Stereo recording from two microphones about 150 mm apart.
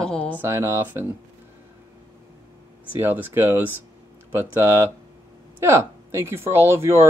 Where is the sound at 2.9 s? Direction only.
15° right (ahead or behind).